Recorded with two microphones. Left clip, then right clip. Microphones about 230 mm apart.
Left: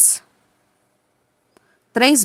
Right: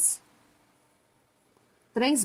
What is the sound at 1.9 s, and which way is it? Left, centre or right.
Speech, left.